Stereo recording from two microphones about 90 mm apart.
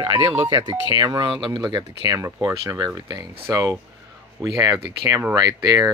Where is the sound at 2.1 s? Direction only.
35° right (ahead or behind); by 3.3 s 55° right (ahead or behind).